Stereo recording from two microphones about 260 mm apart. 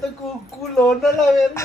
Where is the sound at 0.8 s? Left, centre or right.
Centre.